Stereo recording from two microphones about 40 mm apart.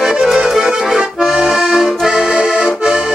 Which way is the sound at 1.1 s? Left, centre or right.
Centre.